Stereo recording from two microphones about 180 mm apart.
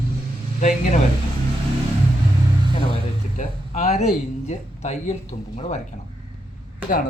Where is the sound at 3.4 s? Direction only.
40° left (ahead or behind).